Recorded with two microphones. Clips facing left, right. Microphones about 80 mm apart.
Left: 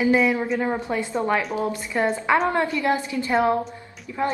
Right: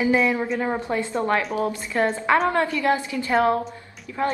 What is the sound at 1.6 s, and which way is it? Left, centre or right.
A woman's voice, left.